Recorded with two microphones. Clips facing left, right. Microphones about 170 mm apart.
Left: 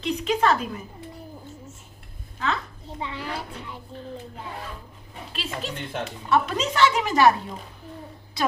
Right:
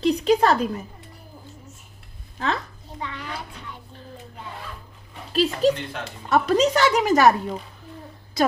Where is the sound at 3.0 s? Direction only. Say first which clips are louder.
Left 1 dB; 30° left (ahead or behind).